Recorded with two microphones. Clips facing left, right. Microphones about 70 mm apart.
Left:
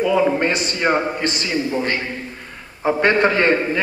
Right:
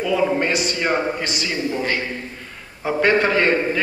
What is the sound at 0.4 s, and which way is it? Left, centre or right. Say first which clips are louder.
Speech: left 1 dB; left.